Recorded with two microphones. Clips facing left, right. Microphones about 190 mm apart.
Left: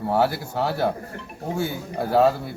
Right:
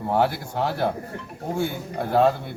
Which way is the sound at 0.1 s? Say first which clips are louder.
Even; centre (ahead or behind).